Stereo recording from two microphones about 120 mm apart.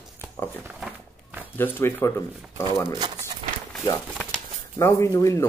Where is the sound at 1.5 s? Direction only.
15° left (ahead or behind).